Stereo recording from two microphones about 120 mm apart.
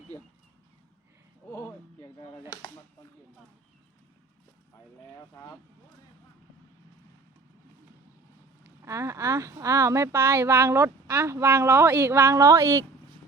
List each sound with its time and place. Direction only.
5.1 s vehicle: 25° left (ahead or behind)
8.8 s speech: 25° right (ahead or behind)